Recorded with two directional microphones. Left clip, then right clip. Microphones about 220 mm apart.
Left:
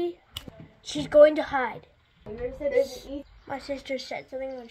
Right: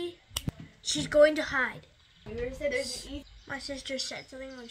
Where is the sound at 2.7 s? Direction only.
50° left (ahead or behind).